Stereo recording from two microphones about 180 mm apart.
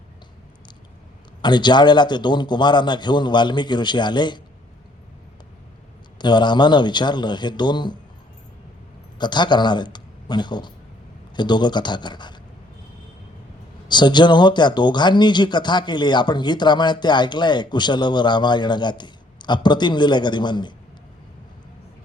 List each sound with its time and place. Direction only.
1.4 s speech: 25° left (ahead or behind)
6.1 s speech: 25° left (ahead or behind)
9.1 s speech: 25° left (ahead or behind)
13.8 s speech: 25° left (ahead or behind)